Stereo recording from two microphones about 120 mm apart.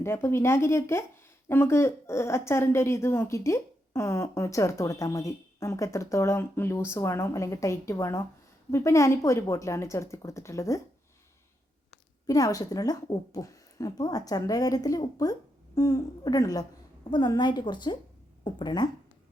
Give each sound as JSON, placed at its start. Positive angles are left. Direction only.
{"t": 0.0, "sound": "speech", "side_deg": 20}
{"t": 12.2, "sound": "speech", "side_deg": 30}